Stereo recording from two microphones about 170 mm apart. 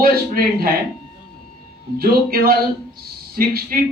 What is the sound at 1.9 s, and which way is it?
A man's voice, 60° right (ahead or behind).